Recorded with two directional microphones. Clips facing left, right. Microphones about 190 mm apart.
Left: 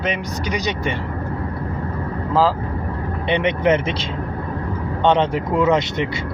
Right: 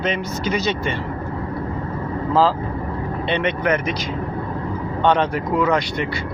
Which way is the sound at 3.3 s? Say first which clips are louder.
Left 3 dB; 15° left (ahead or behind).